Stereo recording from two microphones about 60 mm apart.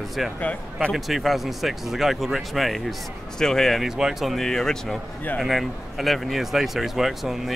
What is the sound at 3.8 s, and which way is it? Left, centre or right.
Speech, centre.